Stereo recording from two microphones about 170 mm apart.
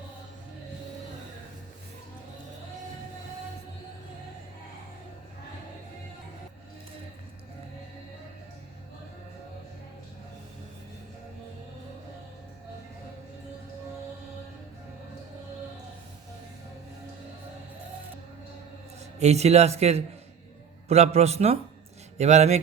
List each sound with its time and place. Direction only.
19.2 s speech: 40° right (ahead or behind)